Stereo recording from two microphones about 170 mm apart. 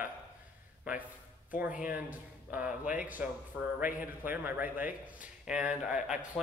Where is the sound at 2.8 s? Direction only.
50° left (ahead or behind).